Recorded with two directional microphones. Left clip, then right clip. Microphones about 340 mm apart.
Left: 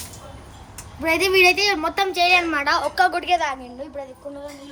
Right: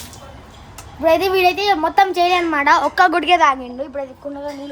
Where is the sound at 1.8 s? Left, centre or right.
Centre.